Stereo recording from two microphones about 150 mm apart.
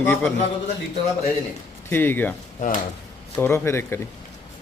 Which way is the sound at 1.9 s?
15° left (ahead or behind).